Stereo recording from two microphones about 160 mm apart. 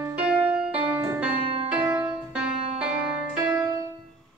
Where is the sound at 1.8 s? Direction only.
30° right (ahead or behind).